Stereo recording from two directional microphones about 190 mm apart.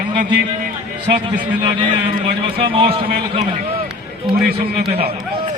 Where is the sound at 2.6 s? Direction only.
30° right (ahead or behind).